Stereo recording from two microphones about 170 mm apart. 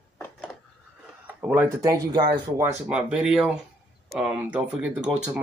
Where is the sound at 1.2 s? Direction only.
10° right (ahead or behind).